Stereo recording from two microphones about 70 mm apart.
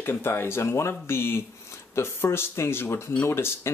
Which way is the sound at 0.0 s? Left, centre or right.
Left.